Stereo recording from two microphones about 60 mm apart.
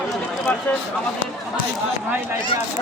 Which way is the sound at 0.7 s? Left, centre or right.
Left.